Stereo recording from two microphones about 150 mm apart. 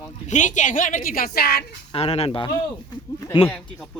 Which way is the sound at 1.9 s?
40° left (ahead or behind).